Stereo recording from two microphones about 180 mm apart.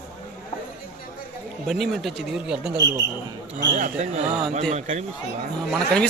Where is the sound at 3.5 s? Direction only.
45° right (ahead or behind).